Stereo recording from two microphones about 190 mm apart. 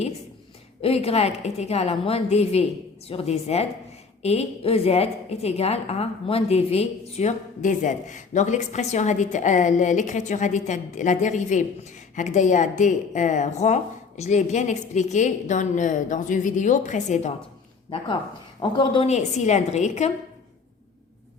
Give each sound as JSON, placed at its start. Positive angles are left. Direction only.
{"t": 0.8, "sound": "a woman's voice", "side_deg": 30}
{"t": 18.8, "sound": "a woman's voice", "side_deg": 30}